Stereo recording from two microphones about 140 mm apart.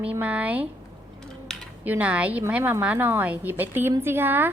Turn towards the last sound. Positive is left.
turn(degrees=-15)  # may be behind; listen again after turning